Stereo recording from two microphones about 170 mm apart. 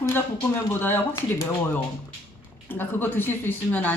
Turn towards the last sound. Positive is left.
turn(degrees=10)  # may be behind; listen again after turning